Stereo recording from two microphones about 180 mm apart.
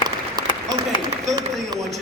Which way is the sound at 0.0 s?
25° right (ahead or behind).